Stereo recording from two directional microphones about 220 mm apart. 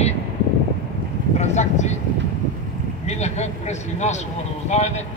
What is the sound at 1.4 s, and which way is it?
Speech, 30° left (ahead or behind).